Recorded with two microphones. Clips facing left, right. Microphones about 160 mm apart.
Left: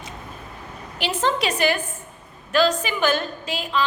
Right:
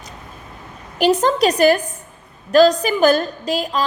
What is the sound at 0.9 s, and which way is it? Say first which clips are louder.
A woman's voice: right 8 dB; 40° right (ahead or behind).